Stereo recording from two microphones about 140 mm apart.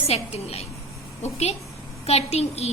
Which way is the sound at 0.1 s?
45° left (ahead or behind).